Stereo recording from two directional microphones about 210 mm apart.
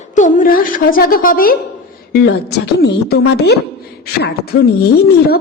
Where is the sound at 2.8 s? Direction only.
50° left (ahead or behind).